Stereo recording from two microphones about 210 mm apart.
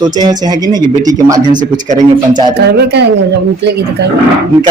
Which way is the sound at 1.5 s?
40° right (ahead or behind).